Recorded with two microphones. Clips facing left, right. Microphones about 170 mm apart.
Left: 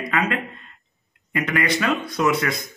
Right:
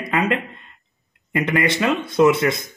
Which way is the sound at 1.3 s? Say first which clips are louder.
Right 3 dB; 20° right (ahead or behind).